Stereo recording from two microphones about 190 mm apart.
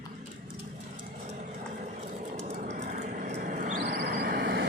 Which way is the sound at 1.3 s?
40° right (ahead or behind).